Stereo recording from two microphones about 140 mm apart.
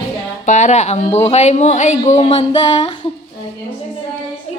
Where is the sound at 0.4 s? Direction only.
55° left (ahead or behind); by 2.9 s 35° left (ahead or behind).